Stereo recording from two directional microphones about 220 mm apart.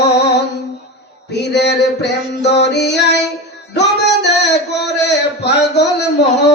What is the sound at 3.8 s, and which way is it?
Music, 50° left (ahead or behind).